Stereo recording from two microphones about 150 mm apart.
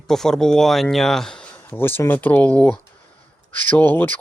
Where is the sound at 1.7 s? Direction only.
15° left (ahead or behind).